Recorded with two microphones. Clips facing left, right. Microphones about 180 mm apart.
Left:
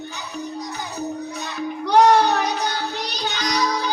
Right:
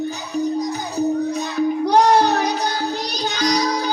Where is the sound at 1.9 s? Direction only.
40° right (ahead or behind).